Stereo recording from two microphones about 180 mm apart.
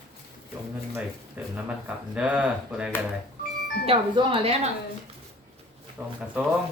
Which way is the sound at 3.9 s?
30° right (ahead or behind).